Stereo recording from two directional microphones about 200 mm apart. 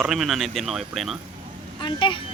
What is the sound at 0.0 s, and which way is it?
Speech, centre (ahead or behind).